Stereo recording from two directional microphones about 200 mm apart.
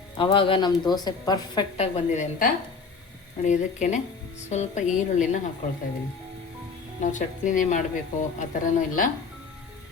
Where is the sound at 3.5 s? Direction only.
35° left (ahead or behind).